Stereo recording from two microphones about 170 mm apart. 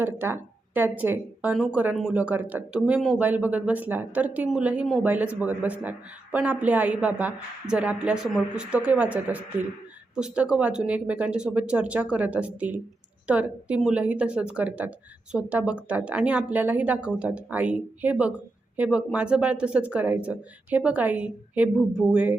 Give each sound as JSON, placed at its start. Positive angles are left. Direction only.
{"t": 0.0, "sound": "speech", "side_deg": -10}